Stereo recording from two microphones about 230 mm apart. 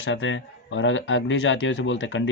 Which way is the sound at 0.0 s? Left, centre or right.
Left.